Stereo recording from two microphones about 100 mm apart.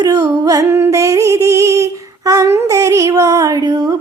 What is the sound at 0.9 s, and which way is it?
Female singing, 30° right (ahead or behind).